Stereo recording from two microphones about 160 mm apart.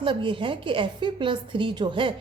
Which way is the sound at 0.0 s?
30° right (ahead or behind).